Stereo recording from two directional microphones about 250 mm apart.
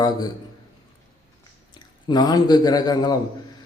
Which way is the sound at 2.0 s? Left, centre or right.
Centre.